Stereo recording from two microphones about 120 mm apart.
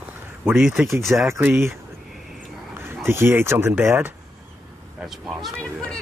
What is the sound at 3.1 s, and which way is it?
Speech, 20° right (ahead or behind).